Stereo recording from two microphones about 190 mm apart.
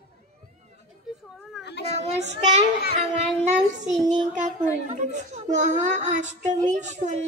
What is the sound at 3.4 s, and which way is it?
A woman's voice, 40° right (ahead or behind).